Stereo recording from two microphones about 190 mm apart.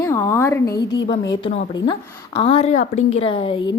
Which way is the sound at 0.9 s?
65° left (ahead or behind).